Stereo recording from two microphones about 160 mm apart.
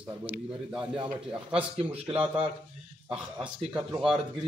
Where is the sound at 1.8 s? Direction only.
35° right (ahead or behind).